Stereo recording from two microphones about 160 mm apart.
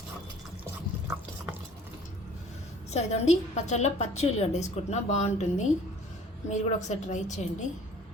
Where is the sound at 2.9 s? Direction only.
45° left (ahead or behind).